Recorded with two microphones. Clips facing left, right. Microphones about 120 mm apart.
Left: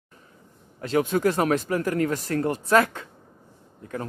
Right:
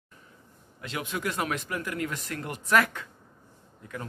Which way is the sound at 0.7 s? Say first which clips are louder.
Left 11 dB; 40° left (ahead or behind).